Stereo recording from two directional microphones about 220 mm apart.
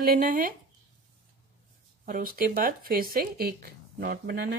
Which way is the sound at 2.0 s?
40° right (ahead or behind).